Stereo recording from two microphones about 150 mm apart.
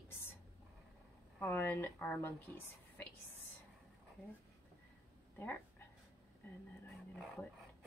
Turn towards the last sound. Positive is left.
turn(degrees=0)  # may be behind; listen again after turning